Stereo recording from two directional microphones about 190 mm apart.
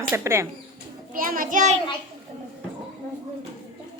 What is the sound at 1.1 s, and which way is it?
Speech, 45° right (ahead or behind).